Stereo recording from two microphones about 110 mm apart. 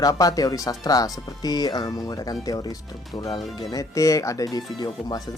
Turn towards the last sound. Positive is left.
turn(degrees=40)  # may be behind; listen again after turning